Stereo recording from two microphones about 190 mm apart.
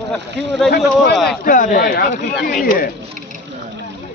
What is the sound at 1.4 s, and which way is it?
Speech, 45° left (ahead or behind).